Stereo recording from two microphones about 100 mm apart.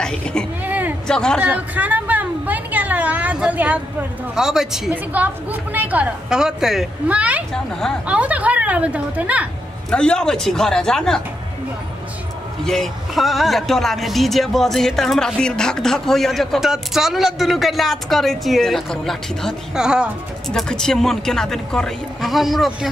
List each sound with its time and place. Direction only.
0.0 s a woman's voice: 10° left (ahead or behind)
0.7 s a sound: 15° right (ahead or behind)
1.0 s a woman's voice: 5° left (ahead or behind)
1.4 s a woman's voice: 15° right (ahead or behind)
4.9 s a woman's voice: 15° right (ahead or behind)
6.2 s speech: 5° right (ahead or behind)
7.1 s a woman's voice: 15° right (ahead or behind)
9.8 s speech: 10° left (ahead or behind)
12.6 s a woman's voice: 5° left (ahead or behind)
20.4 s speech: 5° left (ahead or behind)